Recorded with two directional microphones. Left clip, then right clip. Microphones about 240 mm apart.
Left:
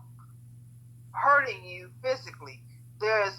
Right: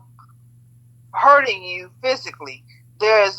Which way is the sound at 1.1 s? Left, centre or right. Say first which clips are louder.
Right 10 dB; right.